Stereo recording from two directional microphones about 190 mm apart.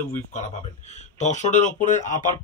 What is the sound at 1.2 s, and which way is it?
Speech, 40° left (ahead or behind).